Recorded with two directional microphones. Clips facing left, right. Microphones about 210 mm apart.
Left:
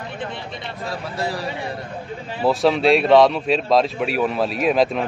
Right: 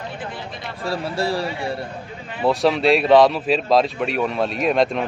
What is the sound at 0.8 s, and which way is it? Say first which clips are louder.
Speech: right 4 dB; 30° right (ahead or behind).